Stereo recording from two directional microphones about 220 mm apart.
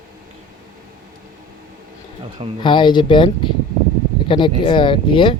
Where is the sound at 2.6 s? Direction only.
20° left (ahead or behind).